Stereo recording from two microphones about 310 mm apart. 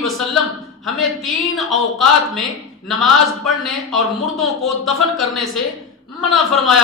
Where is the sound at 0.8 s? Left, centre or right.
Centre.